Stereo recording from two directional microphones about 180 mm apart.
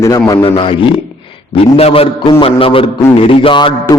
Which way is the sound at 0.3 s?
25° left (ahead or behind).